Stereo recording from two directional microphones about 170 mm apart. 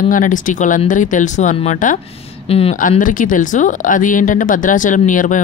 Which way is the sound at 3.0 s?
50° left (ahead or behind).